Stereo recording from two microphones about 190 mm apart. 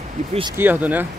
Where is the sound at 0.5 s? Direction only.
10° right (ahead or behind).